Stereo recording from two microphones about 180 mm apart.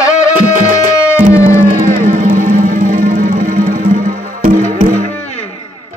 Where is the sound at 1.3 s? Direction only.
45° right (ahead or behind).